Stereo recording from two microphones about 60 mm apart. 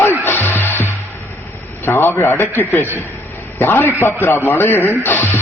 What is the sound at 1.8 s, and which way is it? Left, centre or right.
A man's voice, left.